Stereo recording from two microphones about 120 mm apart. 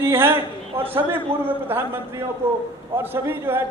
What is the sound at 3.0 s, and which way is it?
Speech, 20° right (ahead or behind).